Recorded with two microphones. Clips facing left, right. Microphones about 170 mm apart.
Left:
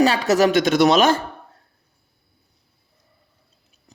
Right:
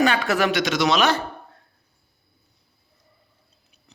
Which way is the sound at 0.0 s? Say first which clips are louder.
Left 4 dB; 35° left (ahead or behind).